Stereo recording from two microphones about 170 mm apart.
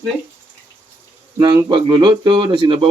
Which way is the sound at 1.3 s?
20° right (ahead or behind).